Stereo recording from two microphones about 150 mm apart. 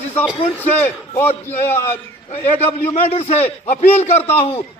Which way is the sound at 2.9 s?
45° left (ahead or behind).